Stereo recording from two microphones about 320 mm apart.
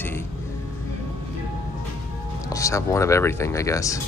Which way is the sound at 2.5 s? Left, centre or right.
Centre.